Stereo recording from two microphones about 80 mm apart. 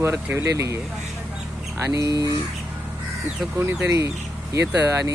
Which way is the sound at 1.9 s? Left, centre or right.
Right.